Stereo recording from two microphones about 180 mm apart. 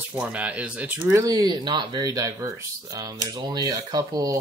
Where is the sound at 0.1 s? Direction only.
5° right (ahead or behind).